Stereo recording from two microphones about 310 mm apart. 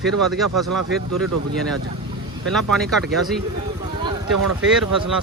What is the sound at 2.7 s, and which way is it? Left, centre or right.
Speech, centre.